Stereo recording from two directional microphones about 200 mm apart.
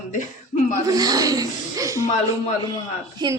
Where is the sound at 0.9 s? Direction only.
20° right (ahead or behind).